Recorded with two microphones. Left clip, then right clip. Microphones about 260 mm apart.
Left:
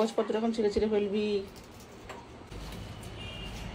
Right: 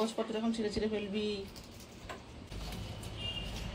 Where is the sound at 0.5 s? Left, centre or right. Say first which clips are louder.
Left 7 dB; centre.